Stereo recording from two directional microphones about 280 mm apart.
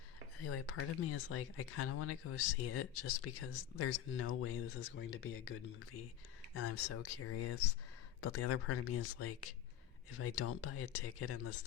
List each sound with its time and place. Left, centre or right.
0.4 s speech: left
6.5 s speech: left